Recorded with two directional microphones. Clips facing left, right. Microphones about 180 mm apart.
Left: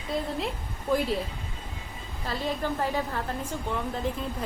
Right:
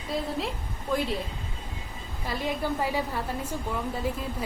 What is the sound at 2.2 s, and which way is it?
A woman's voice, 15° right (ahead or behind).